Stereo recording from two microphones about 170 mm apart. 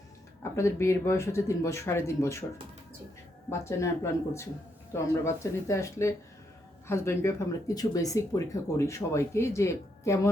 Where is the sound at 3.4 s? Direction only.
15° left (ahead or behind).